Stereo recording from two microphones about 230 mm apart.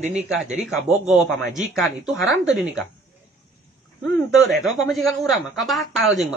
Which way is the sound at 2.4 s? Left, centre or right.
Right.